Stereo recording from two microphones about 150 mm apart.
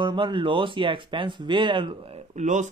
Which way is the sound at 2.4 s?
55° right (ahead or behind).